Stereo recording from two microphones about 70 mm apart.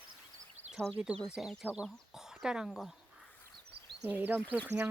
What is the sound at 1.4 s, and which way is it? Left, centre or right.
Speech, centre.